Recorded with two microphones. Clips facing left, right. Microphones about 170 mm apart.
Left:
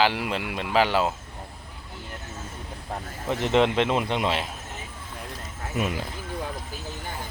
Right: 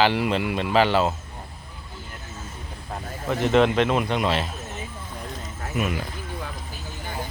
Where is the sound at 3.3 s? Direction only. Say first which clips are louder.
Right 2 dB; 25° left (ahead or behind).